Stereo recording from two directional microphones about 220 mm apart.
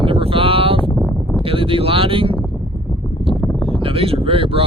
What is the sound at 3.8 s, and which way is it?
Speech, 25° right (ahead or behind).